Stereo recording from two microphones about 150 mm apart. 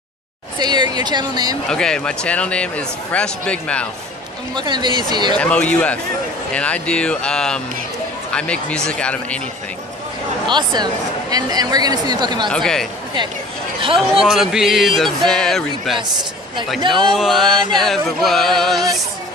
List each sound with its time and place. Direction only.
0.6 s speech: 30° right (ahead or behind)
1.7 s speech: 5° left (ahead or behind)
4.6 s speech: 30° right (ahead or behind)
5.4 s speech: 10° left (ahead or behind)
10.4 s speech: 30° right (ahead or behind)
12.4 s music: 5° left (ahead or behind)
13.7 s speech: 35° right (ahead or behind)
14.2 s music: 5° right (ahead or behind)
17.1 s music: centre (ahead or behind)